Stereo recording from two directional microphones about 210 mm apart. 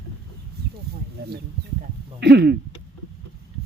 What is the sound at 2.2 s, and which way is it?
Speech, 55° right (ahead or behind).